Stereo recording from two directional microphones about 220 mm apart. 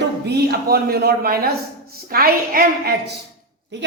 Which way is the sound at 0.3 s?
45° right (ahead or behind).